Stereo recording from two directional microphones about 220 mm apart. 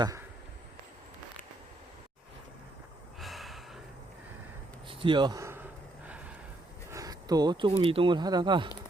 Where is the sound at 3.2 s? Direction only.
Centre (ahead or behind).